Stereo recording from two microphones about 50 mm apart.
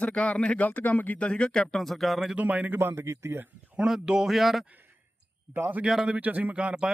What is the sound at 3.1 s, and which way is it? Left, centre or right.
Speech, right.